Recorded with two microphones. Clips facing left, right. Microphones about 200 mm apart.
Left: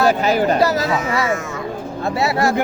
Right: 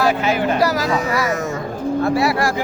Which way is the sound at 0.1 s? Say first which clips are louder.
Left 2 dB; 40° left (ahead or behind).